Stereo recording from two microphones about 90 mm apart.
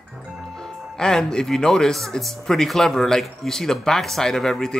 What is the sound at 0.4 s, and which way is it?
Speech, 5° left (ahead or behind).